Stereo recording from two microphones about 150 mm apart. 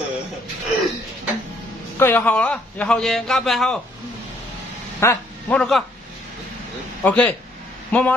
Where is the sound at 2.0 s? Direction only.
15° left (ahead or behind).